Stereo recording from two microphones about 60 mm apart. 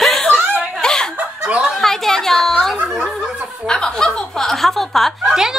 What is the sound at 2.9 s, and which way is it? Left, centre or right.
Snicker, centre.